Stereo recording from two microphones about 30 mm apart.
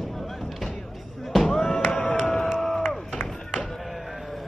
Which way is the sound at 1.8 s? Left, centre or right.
Left.